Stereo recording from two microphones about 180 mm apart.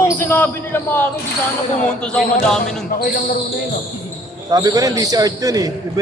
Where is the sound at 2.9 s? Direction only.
55° left (ahead or behind).